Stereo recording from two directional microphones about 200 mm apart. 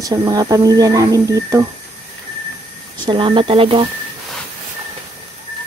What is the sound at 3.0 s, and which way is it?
Speech, 25° right (ahead or behind).